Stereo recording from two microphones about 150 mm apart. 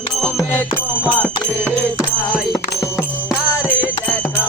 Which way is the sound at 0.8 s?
10° right (ahead or behind).